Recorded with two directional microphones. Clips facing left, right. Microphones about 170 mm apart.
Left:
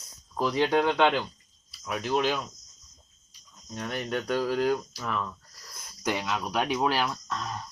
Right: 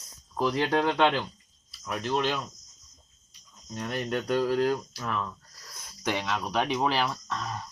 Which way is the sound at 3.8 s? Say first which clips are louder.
Right 1 dB; centre (ahead or behind).